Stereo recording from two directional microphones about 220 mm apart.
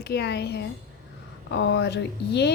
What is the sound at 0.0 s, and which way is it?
A woman's voice, 50° left (ahead or behind).